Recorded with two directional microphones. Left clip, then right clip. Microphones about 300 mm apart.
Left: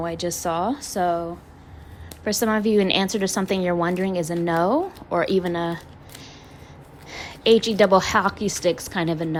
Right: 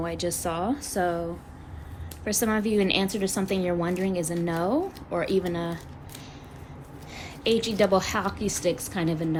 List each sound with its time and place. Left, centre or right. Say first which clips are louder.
0.0 s a woman's voice: left 3 dB; centre
2.2 s a woman's voice: left 5 dB; centre
7.1 s a woman's voice: left 8 dB; centre